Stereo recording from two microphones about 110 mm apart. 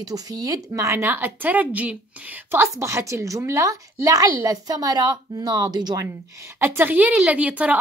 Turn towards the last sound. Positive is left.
turn(degrees=-10)  # may be behind; listen again after turning